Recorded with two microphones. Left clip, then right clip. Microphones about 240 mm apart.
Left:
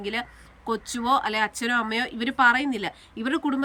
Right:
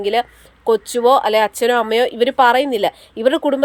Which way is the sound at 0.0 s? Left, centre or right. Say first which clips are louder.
Right 13 dB; centre.